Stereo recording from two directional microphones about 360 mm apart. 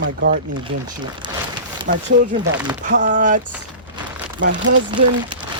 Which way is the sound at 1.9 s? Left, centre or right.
Right.